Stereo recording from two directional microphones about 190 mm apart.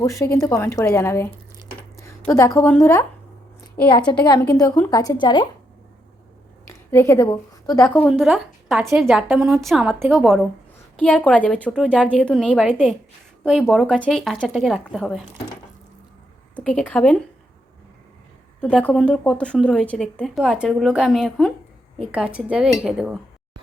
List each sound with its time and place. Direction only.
0.0 s speech: 15° left (ahead or behind)
2.0 s a sound: 15° left (ahead or behind)
2.7 s speech: 15° left (ahead or behind)
4.3 s a woman's voice: 20° left (ahead or behind)
6.7 s a woman's voice: 15° left (ahead or behind)
7.9 s a woman's voice: 5° left (ahead or behind)
16.6 s speech: 5° left (ahead or behind)
18.6 s a woman's voice: 5° left (ahead or behind)